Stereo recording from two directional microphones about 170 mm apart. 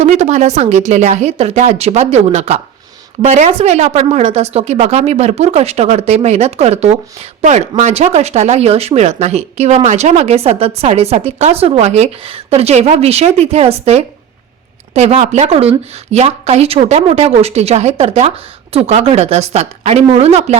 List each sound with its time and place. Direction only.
0.0 s speech: 40° right (ahead or behind)